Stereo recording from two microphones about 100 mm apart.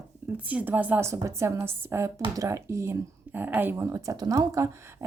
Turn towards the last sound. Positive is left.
turn(degrees=-35)  # may be behind; listen again after turning